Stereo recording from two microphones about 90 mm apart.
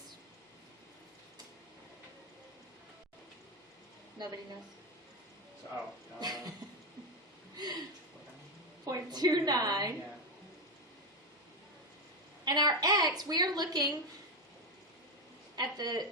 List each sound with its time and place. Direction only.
6.1 s a woman's voice: 50° right (ahead or behind)
7.5 s a sound: 50° right (ahead or behind)
8.8 s a woman's voice: 45° right (ahead or behind)
12.5 s a woman's voice: 50° right (ahead or behind)
15.5 s a woman's voice: 50° right (ahead or behind)